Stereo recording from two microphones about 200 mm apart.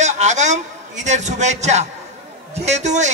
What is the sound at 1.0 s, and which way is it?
A man's voice, 35° right (ahead or behind).